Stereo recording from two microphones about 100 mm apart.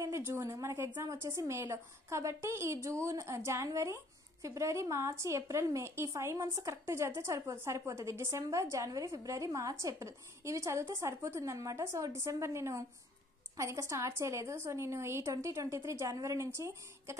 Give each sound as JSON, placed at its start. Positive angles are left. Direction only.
{"t": 0.0, "sound": "a woman's voice", "side_deg": -25}